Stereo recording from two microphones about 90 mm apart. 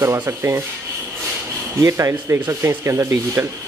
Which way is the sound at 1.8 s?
35° right (ahead or behind).